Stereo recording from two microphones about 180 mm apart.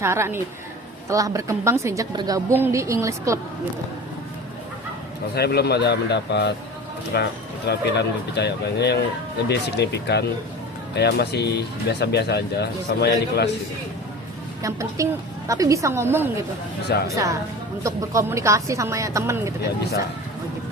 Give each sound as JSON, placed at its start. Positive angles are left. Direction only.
{"t": 0.0, "sound": "a woman's voice", "side_deg": -15}
{"t": 5.3, "sound": "speech", "side_deg": 65}
{"t": 14.6, "sound": "a woman's voice", "side_deg": -15}
{"t": 16.9, "sound": "speech", "side_deg": 65}
{"t": 17.8, "sound": "a woman's voice", "side_deg": -15}